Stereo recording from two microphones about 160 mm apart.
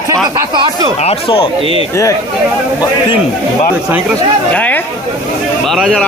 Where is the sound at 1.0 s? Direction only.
35° left (ahead or behind).